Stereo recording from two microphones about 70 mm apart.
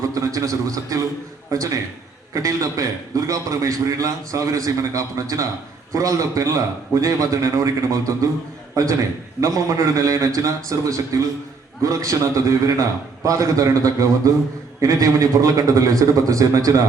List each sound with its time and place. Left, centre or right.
0.0 s a man's voice: right